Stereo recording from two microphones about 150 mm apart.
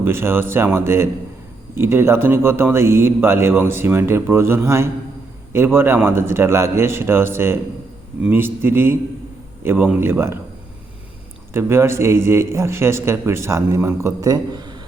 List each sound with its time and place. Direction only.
0.0 s a man's voice: 15° right (ahead or behind)
11.5 s a man's voice: 15° right (ahead or behind)